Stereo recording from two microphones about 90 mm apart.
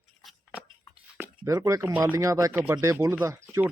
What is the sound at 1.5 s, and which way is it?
Speech, 35° right (ahead or behind).